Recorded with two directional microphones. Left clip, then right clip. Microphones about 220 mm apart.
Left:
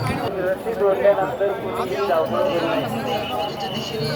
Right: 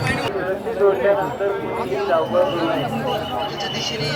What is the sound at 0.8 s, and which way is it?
Clip-clop, 50° right (ahead or behind).